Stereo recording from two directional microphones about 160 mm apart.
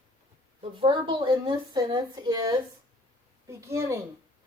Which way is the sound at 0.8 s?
30° right (ahead or behind).